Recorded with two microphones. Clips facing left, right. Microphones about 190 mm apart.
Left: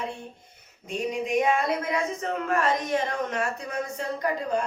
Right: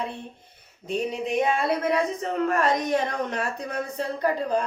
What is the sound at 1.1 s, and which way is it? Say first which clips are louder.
A woman's voice: left 2 dB; 35° right (ahead or behind).